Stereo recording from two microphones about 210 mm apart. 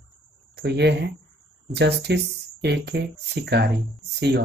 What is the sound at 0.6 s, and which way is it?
Speech, 55° right (ahead or behind).